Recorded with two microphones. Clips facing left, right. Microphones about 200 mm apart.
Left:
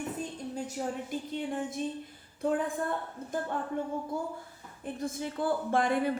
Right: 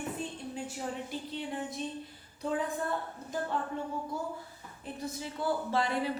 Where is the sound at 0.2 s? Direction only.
40° left (ahead or behind).